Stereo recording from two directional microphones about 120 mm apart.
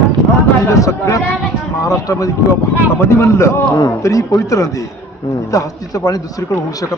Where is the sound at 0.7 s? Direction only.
25° left (ahead or behind).